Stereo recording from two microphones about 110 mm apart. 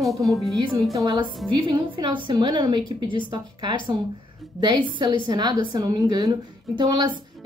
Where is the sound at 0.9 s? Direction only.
40° right (ahead or behind).